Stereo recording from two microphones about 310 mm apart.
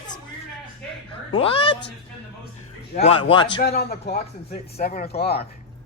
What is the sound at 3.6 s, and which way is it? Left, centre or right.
A man's voice, left.